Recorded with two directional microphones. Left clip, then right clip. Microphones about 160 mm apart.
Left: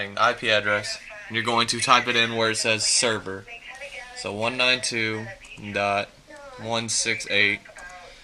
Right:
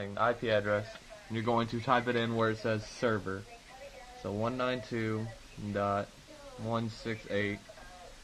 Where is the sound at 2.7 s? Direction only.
20° left (ahead or behind).